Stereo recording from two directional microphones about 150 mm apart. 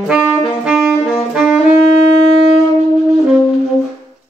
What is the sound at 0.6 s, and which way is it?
Saxophone, 5° right (ahead or behind).